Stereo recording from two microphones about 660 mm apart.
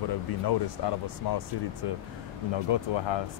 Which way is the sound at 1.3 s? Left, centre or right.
Left.